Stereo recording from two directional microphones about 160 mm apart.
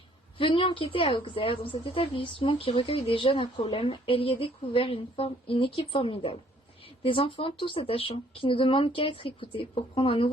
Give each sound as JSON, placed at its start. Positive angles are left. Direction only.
{"t": 0.3, "sound": "speech", "side_deg": 35}